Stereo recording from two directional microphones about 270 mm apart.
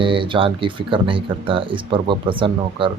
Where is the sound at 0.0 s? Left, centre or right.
Centre.